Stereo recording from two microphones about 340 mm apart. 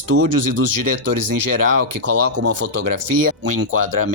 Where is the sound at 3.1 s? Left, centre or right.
Right.